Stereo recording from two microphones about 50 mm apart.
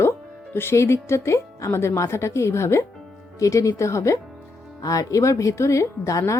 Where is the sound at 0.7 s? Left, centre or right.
Left.